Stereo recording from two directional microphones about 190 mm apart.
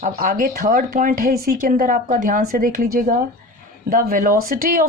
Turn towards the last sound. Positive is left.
turn(degrees=-45)  # may be behind; listen again after turning